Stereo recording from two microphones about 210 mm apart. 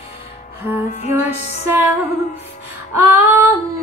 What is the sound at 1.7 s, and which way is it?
Music, 10° right (ahead or behind).